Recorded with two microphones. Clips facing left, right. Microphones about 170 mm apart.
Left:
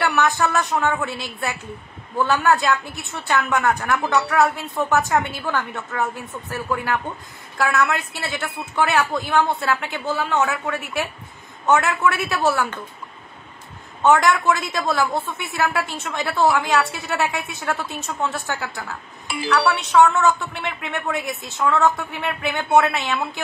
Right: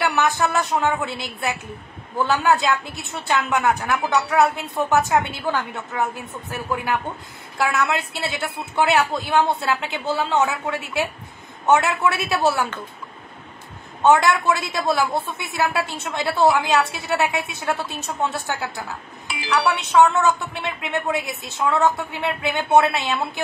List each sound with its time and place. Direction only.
0.0 s speech: 20° right (ahead or behind)
14.0 s speech: 15° right (ahead or behind)
20.6 s speech: 15° right (ahead or behind)